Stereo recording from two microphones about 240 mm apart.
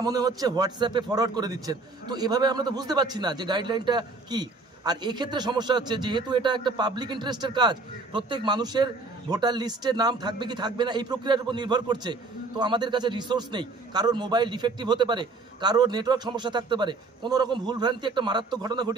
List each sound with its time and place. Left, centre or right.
0.0 s a man's voice: centre